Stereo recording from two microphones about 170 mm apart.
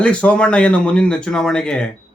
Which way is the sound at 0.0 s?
5° left (ahead or behind).